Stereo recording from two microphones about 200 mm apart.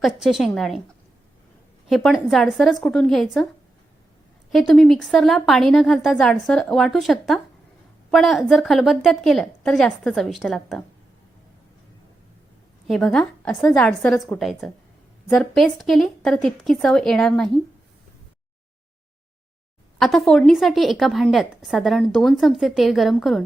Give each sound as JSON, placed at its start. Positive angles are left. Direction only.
{"t": 0.0, "sound": "a woman's voice", "side_deg": 0}
{"t": 1.9, "sound": "a woman's voice", "side_deg": 0}
{"t": 4.5, "sound": "a woman's voice", "side_deg": 0}
{"t": 12.9, "sound": "a woman's voice", "side_deg": 0}
{"t": 20.0, "sound": "a woman's voice", "side_deg": 0}